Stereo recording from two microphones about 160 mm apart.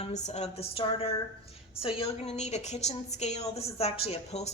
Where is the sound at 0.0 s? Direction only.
45° left (ahead or behind).